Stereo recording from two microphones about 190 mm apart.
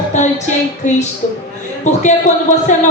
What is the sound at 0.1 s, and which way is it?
Music, 40° left (ahead or behind).